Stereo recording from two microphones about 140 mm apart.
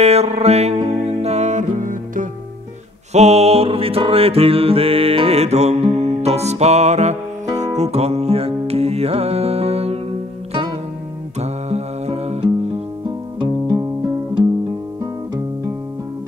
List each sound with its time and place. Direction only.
0.0 s music: 50° right (ahead or behind); by 2.2 s 70° right (ahead or behind)
3.1 s music: 50° right (ahead or behind)
11.3 s music: 50° right (ahead or behind)